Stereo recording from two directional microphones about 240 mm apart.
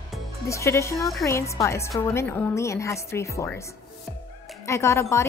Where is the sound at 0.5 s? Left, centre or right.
Centre.